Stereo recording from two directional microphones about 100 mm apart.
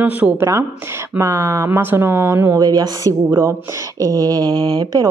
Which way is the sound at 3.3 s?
25° right (ahead or behind).